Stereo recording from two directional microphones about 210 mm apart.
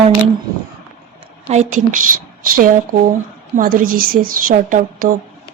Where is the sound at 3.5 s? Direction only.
40° right (ahead or behind).